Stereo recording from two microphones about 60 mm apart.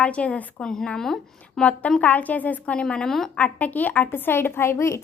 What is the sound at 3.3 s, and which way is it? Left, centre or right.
A woman's voice, left.